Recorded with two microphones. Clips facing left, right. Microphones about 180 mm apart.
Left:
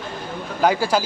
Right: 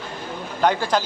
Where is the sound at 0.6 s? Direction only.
10° left (ahead or behind).